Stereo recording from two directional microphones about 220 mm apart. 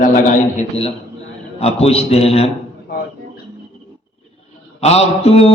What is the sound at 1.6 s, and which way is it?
Speech, 30° left (ahead or behind).